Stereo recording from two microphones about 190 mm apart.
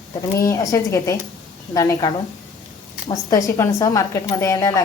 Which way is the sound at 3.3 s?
15° left (ahead or behind).